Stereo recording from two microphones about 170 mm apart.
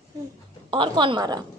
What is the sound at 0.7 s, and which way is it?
Speech, 30° right (ahead or behind).